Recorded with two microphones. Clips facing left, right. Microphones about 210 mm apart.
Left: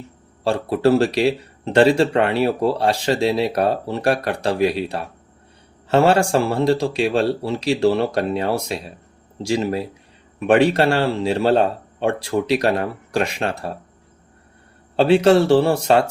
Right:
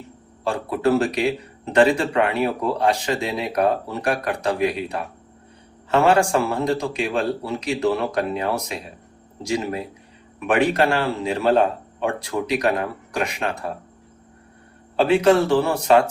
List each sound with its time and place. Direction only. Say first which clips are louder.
0.4 s speech: left 4 dB; 30° left (ahead or behind)
10.4 s speech: left 4 dB; 30° left (ahead or behind)
14.9 s speech: left 3 dB; 30° left (ahead or behind)